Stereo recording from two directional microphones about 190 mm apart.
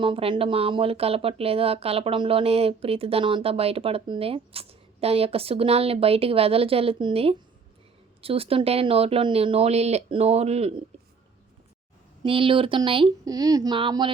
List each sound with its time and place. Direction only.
0.0 s speech: 25° right (ahead or behind)
12.2 s speech: 30° right (ahead or behind)